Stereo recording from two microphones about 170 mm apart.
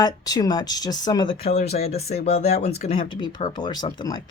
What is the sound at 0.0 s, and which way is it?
Speech, 25° left (ahead or behind).